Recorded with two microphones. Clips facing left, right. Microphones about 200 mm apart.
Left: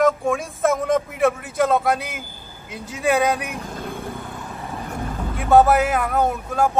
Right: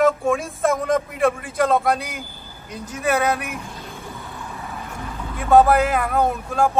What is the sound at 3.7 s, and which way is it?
Vehicle, 50° left (ahead or behind).